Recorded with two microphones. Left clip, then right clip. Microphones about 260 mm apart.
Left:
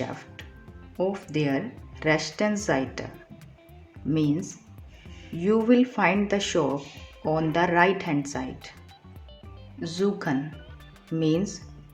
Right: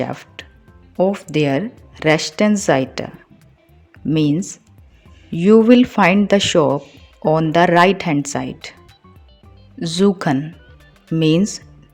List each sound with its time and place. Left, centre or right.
0.4 s music: right
1.0 s speech: right
4.1 s speech: right
9.8 s speech: right